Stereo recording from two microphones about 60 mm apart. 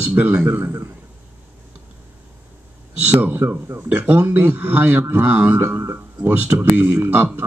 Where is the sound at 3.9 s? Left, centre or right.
Right.